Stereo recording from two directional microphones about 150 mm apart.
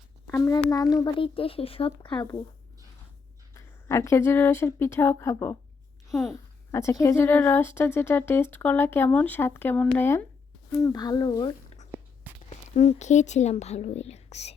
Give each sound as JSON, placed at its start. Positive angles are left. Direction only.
{"t": 0.3, "sound": "speech", "side_deg": 20}
{"t": 3.5, "sound": "a woman's voice", "side_deg": 20}
{"t": 12.5, "sound": "speech", "side_deg": 50}